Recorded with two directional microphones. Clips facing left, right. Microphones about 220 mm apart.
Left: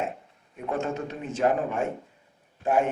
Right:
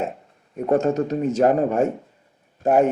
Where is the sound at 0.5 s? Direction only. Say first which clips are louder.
Right 10 dB; 40° right (ahead or behind).